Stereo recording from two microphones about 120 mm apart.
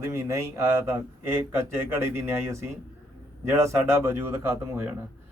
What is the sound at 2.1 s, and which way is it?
A man's voice, 25° right (ahead or behind).